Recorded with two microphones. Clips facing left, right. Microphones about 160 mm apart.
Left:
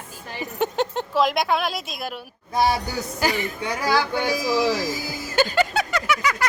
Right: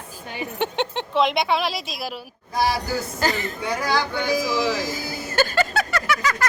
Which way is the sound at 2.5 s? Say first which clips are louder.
Left 1 dB; 20° left (ahead or behind).